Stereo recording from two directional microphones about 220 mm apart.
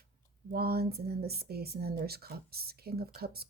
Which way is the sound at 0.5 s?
45° right (ahead or behind).